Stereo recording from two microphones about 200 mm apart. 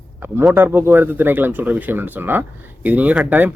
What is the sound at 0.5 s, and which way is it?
Speech, 10° right (ahead or behind).